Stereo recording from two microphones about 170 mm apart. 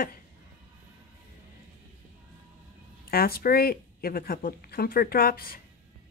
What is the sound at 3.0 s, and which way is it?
Speech, 60° left (ahead or behind).